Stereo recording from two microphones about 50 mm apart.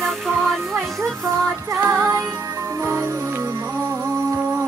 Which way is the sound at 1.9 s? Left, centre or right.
Right.